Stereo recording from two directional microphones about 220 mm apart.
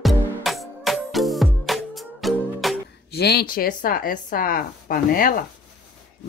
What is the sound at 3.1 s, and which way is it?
Speech, 45° left (ahead or behind).